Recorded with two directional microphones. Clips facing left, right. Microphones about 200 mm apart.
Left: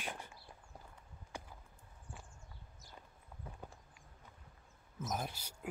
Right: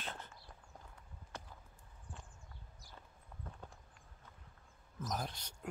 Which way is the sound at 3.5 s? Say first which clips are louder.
Left 1 dB; 10° left (ahead or behind).